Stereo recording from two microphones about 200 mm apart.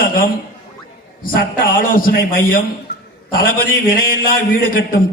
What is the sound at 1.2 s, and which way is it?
A man's voice, 45° left (ahead or behind).